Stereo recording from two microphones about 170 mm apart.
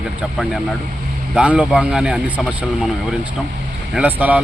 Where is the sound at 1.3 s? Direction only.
5° right (ahead or behind).